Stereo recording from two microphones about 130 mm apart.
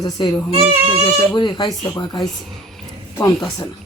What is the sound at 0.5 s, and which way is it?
Speech, 45° right (ahead or behind).